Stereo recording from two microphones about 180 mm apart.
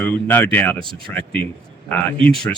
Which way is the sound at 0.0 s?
10° left (ahead or behind).